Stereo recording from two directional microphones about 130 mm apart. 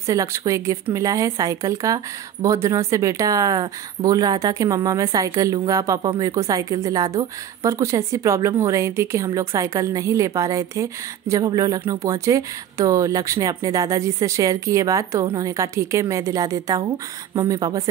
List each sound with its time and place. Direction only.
0.0 s a woman's voice: 25° right (ahead or behind)